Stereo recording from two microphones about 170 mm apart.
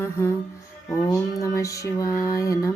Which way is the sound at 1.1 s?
20° left (ahead or behind).